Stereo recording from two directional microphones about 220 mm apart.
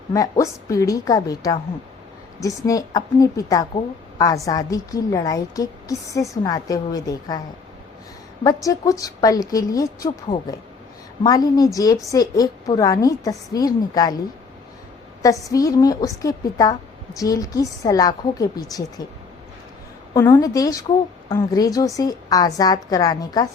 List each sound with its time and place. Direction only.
0.1 s a woman's voice: 15° left (ahead or behind)
2.6 s a woman's voice: 15° left (ahead or behind)
8.4 s a woman's voice: 15° left (ahead or behind)
15.2 s a woman's voice: 15° left (ahead or behind)
20.1 s a woman's voice: 15° left (ahead or behind)